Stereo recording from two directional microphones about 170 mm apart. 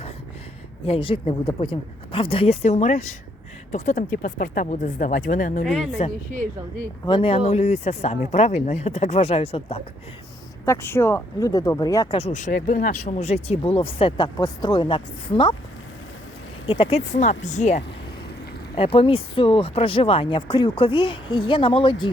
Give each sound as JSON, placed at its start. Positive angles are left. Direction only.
{"t": 0.9, "sound": "speech", "side_deg": 30}
{"t": 5.6, "sound": "speech", "side_deg": 0}
{"t": 7.0, "sound": "speech", "side_deg": 30}
{"t": 10.7, "sound": "speech", "side_deg": 15}
{"t": 12.1, "sound": "speech", "side_deg": 40}
{"t": 16.6, "sound": "speech", "side_deg": 30}
{"t": 17.2, "sound": "speech", "side_deg": 45}
{"t": 18.8, "sound": "speech", "side_deg": 35}